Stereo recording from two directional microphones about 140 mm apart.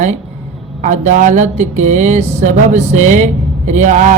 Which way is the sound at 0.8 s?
60° right (ahead or behind).